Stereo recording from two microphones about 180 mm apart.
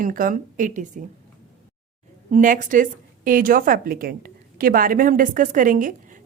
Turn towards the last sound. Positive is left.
turn(degrees=-50)  # may be behind; listen again after turning